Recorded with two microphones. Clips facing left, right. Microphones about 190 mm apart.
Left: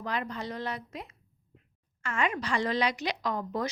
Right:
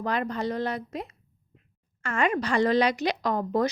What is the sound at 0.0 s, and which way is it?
A woman's voice, 50° right (ahead or behind).